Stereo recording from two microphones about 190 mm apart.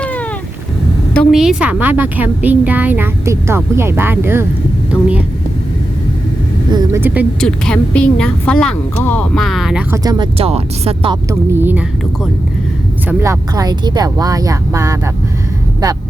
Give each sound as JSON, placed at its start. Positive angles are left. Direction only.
{"t": 0.0, "sound": "cat", "side_deg": 5}
{"t": 1.1, "sound": "a woman's voice", "side_deg": 5}
{"t": 6.7, "sound": "speech", "side_deg": -20}
{"t": 7.0, "sound": "a woman's voice", "side_deg": -10}
{"t": 7.4, "sound": "speech", "side_deg": 5}
{"t": 9.9, "sound": "speech", "side_deg": -20}
{"t": 10.3, "sound": "speech", "side_deg": -30}
{"t": 11.3, "sound": "a woman's voice", "side_deg": -10}